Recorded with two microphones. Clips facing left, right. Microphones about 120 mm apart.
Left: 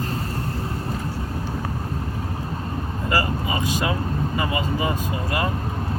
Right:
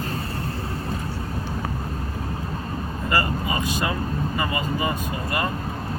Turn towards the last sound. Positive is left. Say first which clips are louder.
# left 1 dB
turn(degrees=20)  # may be behind; listen again after turning